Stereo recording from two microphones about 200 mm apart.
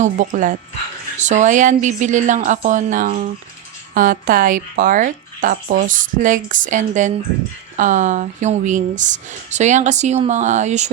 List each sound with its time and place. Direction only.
0.0 s speech: 40° right (ahead or behind)